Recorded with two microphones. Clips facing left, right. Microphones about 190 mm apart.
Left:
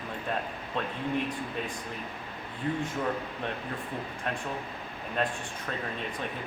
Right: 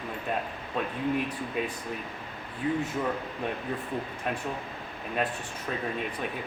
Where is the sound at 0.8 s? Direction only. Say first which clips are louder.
Right 2 dB; 5° right (ahead or behind).